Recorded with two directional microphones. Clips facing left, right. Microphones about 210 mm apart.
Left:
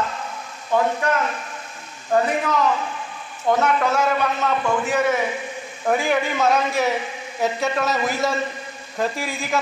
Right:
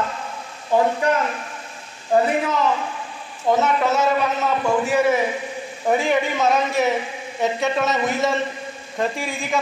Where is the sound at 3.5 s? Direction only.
5° right (ahead or behind).